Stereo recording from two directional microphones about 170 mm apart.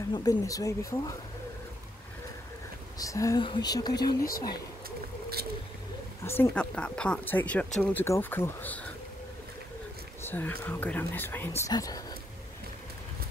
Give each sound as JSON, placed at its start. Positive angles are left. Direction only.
{"t": 0.1, "sound": "speech", "side_deg": 20}
{"t": 3.0, "sound": "speech", "side_deg": 20}
{"t": 6.2, "sound": "speech", "side_deg": 10}
{"t": 10.2, "sound": "speech", "side_deg": 10}